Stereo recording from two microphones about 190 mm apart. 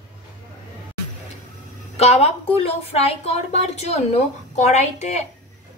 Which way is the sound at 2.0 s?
35° left (ahead or behind).